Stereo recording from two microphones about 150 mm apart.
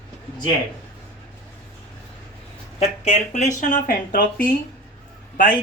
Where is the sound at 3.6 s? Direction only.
65° left (ahead or behind).